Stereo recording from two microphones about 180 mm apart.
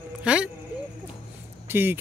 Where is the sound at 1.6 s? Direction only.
10° right (ahead or behind).